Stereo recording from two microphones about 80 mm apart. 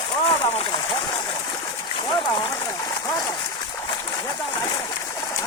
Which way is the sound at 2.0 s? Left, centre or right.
Left.